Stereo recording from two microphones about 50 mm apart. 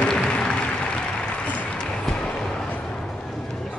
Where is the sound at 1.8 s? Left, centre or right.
Centre.